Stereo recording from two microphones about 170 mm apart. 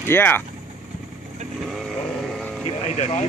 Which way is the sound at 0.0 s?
10° left (ahead or behind).